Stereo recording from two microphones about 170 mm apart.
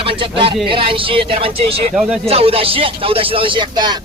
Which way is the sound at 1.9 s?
5° right (ahead or behind).